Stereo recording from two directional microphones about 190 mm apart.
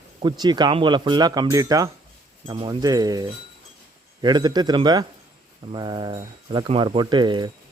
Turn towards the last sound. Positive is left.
turn(degrees=-25)  # may be behind; listen again after turning